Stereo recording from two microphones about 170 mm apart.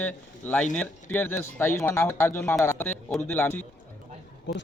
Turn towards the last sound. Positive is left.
turn(degrees=90)